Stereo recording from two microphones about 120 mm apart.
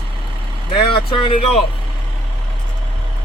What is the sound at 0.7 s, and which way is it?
Speech, 45° left (ahead or behind).